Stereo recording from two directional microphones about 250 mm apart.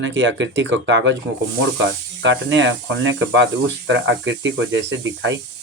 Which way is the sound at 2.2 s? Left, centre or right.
Right.